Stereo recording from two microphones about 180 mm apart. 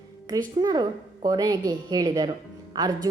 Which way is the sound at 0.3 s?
25° right (ahead or behind).